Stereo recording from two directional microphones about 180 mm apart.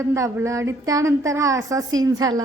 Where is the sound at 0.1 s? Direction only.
15° right (ahead or behind).